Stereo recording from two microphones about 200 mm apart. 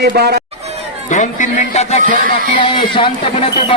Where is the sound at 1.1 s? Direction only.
40° left (ahead or behind).